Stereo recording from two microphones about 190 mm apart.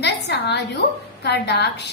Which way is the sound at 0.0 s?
65° left (ahead or behind).